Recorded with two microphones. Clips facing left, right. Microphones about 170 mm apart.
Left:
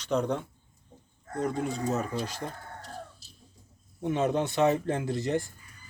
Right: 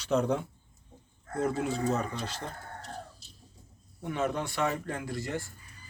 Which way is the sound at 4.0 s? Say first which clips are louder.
Left 5 dB; 20° left (ahead or behind).